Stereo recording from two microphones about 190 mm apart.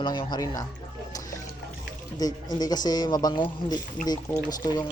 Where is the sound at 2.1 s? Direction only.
20° left (ahead or behind).